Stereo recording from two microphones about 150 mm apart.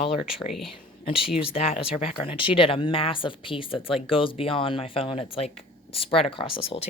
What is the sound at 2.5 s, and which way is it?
Speech, 35° left (ahead or behind).